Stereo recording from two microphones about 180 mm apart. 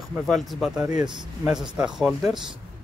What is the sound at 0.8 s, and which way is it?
Speech, 20° right (ahead or behind).